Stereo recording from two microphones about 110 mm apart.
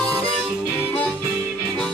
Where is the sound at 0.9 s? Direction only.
15° left (ahead or behind).